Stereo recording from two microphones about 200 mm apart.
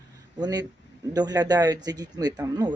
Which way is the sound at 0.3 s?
20° right (ahead or behind).